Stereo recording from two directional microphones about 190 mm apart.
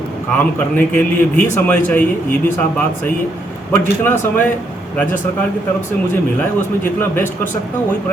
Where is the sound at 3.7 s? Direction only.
10° left (ahead or behind).